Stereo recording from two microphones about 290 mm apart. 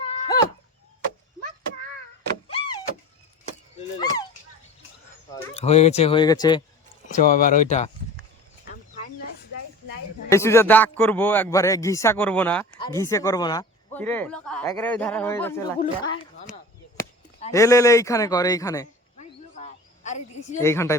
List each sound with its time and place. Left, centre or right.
0.0 s a sound: centre
2.5 s vehicle: centre
3.8 s a sound: centre
5.3 s speech: left
7.1 s speech: left
10.2 s speech: centre
17.5 s speech: centre
19.2 s a sound: left
20.6 s speech: centre